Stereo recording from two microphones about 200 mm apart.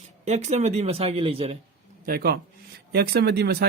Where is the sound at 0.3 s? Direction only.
35° right (ahead or behind).